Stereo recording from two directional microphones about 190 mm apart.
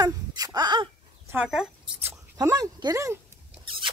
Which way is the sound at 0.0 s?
20° right (ahead or behind).